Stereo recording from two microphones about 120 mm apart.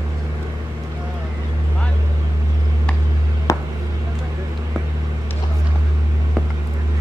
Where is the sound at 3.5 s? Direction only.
30° left (ahead or behind).